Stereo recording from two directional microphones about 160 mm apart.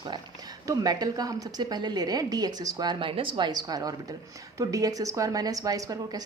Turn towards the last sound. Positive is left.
turn(degrees=-25)  # may be behind; listen again after turning